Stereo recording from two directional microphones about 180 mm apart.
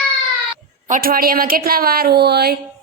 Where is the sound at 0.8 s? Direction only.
50° right (ahead or behind).